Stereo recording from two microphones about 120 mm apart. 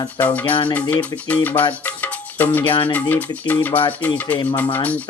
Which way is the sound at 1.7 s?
15° left (ahead or behind).